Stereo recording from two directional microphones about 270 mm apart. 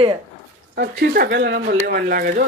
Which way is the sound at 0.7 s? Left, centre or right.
Right.